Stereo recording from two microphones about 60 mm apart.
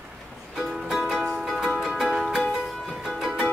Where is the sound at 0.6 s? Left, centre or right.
Centre.